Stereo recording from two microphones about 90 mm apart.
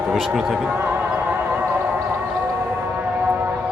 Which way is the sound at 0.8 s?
20° right (ahead or behind).